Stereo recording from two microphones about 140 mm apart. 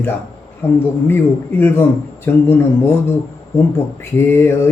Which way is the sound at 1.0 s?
15° left (ahead or behind).